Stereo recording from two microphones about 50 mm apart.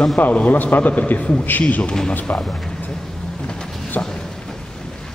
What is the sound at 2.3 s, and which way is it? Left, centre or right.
Speech, left.